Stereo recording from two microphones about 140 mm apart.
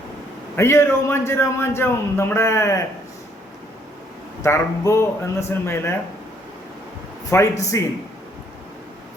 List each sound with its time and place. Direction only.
0.5 s a man's voice: 20° left (ahead or behind)
4.4 s a man's voice: 20° left (ahead or behind)
7.3 s a man's voice: 20° left (ahead or behind)